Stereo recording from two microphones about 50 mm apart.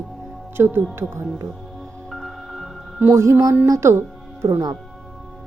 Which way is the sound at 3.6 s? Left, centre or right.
Right.